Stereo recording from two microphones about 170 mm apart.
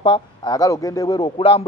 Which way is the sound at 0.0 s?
30° left (ahead or behind).